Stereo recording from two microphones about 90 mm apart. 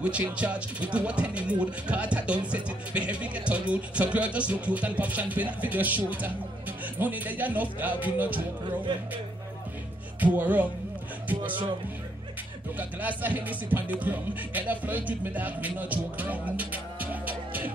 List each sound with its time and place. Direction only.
0.4 s speech: 15° right (ahead or behind)
10.2 s speech: 20° right (ahead or behind)
12.7 s speech: 20° right (ahead or behind)